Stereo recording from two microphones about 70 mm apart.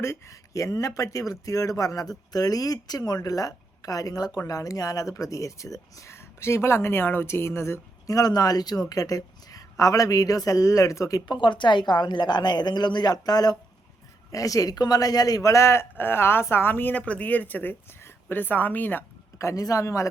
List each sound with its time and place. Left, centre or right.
0.0 s speech: left
8.0 s speech: left
11.3 s a woman's voice: left
14.3 s speech: left
19.4 s speech: left